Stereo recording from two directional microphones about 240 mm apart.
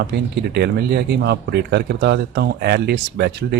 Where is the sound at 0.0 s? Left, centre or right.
Right.